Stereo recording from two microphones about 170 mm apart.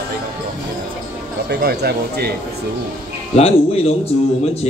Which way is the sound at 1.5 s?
75° right (ahead or behind).